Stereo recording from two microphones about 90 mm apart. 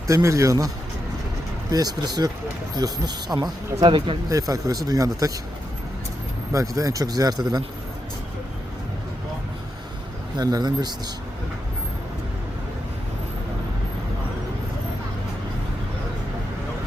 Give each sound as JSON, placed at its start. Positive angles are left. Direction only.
{"t": 0.1, "sound": "speech", "side_deg": -35}
{"t": 1.7, "sound": "speech", "side_deg": -45}
{"t": 3.8, "sound": "speech", "side_deg": -70}
{"t": 4.3, "sound": "speech", "side_deg": -40}
{"t": 6.5, "sound": "speech", "side_deg": -40}
{"t": 10.3, "sound": "speech", "side_deg": -50}